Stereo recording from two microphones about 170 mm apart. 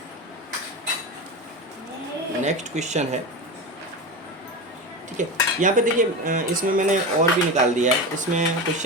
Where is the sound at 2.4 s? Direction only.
45° right (ahead or behind).